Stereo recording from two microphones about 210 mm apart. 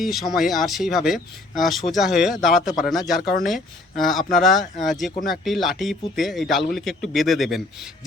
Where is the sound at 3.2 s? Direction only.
45° left (ahead or behind).